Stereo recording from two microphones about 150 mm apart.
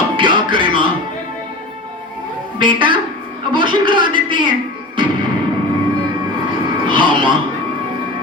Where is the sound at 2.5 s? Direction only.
35° right (ahead or behind).